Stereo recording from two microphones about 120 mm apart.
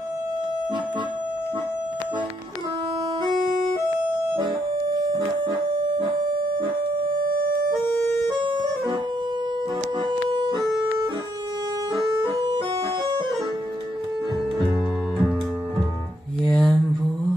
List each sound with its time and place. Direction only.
5.1 s music: 40° right (ahead or behind)
8.5 s music: 40° right (ahead or behind)
10.0 s music: 40° right (ahead or behind)
16.4 s mantra: 5° left (ahead or behind)